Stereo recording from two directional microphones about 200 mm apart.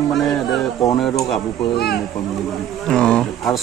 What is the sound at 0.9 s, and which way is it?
Speech, centre (ahead or behind).